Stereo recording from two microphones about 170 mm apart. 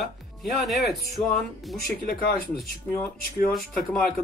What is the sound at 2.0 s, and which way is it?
Speech, 60° left (ahead or behind).